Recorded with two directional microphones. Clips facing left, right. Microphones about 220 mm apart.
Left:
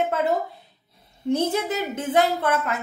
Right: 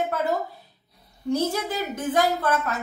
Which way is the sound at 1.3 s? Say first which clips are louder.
Left 2 dB; 25° left (ahead or behind).